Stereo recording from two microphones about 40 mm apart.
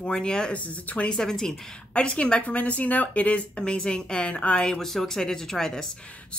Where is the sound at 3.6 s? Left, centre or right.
Left.